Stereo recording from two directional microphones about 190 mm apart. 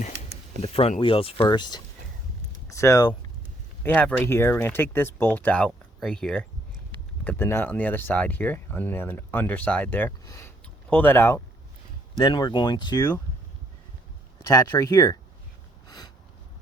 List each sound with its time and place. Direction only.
0.6 s speech: 30° left (ahead or behind); by 11.4 s 10° left (ahead or behind)
12.2 s speech: 25° left (ahead or behind)
14.4 s speech: 15° left (ahead or behind)
15.9 s a sound: 20° left (ahead or behind)